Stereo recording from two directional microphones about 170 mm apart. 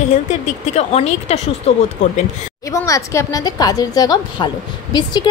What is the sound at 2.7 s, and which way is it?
A woman's voice, 20° left (ahead or behind).